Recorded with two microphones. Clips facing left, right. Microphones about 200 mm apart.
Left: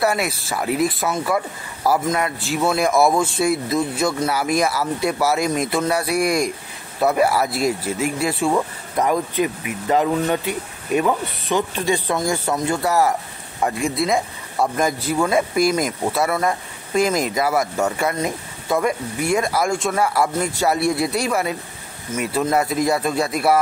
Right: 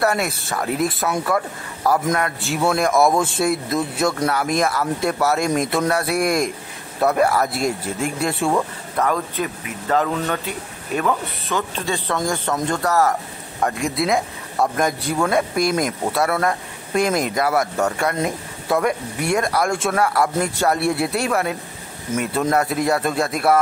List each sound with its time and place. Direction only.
0.0 s speech: centre (ahead or behind)
8.9 s speech: 15° left (ahead or behind)
13.7 s speech: centre (ahead or behind)